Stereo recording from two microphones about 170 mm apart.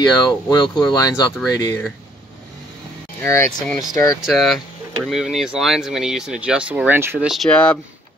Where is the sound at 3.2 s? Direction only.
15° left (ahead or behind).